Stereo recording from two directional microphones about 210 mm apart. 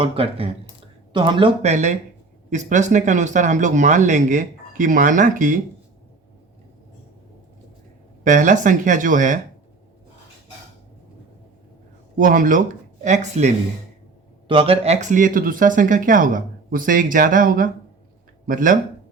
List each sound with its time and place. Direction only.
0.0 s speech: 25° right (ahead or behind)
8.2 s speech: 35° right (ahead or behind)
12.1 s speech: 40° right (ahead or behind)